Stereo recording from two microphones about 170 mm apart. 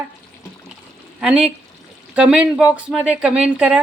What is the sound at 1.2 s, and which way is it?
A woman's voice, 5° right (ahead or behind).